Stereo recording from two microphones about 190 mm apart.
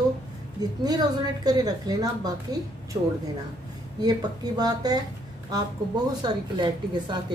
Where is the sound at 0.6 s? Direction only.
20° right (ahead or behind).